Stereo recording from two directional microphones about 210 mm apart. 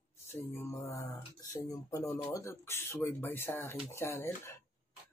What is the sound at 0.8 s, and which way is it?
Speech, 15° left (ahead or behind).